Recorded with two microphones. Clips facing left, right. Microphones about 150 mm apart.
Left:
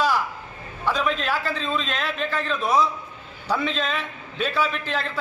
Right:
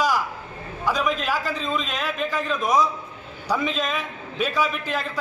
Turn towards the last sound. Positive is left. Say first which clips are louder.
# even
turn(degrees=-10)  # may be behind; listen again after turning